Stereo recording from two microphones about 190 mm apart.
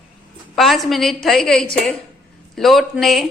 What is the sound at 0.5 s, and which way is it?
A woman's voice, centre (ahead or behind).